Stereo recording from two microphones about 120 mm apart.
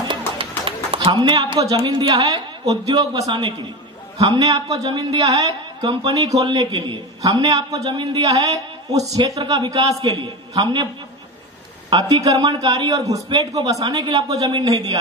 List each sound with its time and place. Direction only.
0.4 s a sound: 45° right (ahead or behind)
1.7 s speech: 40° right (ahead or behind)
8.2 s speech: 30° right (ahead or behind)
11.9 s speech: 35° right (ahead or behind)